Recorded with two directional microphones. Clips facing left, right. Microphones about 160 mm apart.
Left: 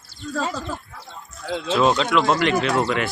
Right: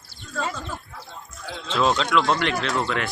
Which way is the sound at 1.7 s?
5° left (ahead or behind).